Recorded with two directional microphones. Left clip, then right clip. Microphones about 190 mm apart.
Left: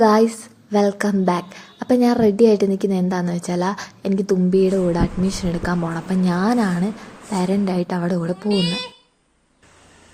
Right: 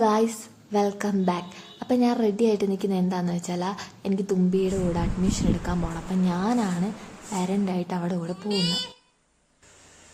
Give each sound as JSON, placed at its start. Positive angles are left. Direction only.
{"t": 0.0, "sound": "speech", "side_deg": 20}
{"t": 8.4, "sound": "speech", "side_deg": -10}